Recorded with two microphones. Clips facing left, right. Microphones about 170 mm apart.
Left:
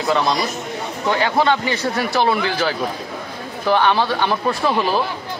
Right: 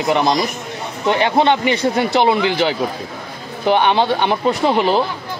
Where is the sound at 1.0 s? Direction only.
20° right (ahead or behind).